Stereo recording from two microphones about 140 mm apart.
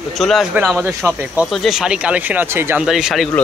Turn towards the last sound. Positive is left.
turn(degrees=0)  # may be behind; listen again after turning